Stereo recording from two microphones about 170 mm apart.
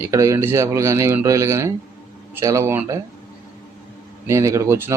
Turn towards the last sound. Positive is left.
turn(degrees=-15)  # may be behind; listen again after turning